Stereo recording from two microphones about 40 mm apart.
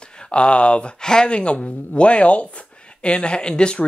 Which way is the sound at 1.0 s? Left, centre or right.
Centre.